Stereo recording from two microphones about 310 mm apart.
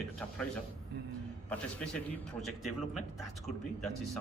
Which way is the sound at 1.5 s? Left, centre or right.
Centre.